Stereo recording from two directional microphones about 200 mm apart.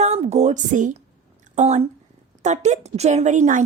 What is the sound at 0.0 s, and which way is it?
A woman's voice, 35° right (ahead or behind).